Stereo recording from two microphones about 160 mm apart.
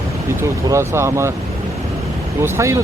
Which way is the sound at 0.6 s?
15° right (ahead or behind).